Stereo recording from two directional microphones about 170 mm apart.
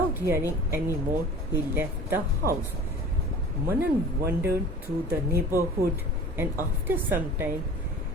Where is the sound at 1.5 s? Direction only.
10° right (ahead or behind).